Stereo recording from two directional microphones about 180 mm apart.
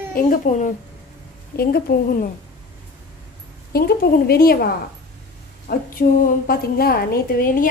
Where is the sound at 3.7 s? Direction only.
55° left (ahead or behind).